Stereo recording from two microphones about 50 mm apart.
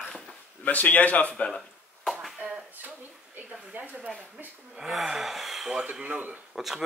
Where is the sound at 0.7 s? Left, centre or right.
Left.